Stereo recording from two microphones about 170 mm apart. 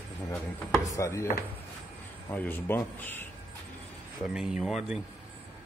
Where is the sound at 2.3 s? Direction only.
10° left (ahead or behind).